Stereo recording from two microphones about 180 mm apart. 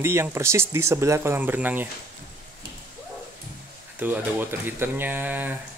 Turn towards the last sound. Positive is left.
turn(degrees=-10)  # may be behind; listen again after turning